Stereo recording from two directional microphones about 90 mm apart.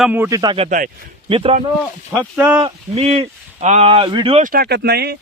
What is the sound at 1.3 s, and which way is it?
Speech, 80° right.